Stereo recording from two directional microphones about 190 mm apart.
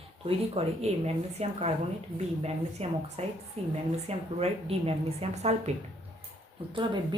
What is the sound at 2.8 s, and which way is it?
A woman's voice, 35° right (ahead or behind).